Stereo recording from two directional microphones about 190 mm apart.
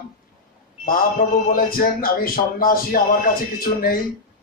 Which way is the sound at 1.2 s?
40° left (ahead or behind).